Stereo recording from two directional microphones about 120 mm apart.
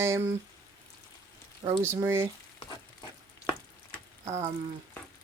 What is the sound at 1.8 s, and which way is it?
Speech, 20° right (ahead or behind).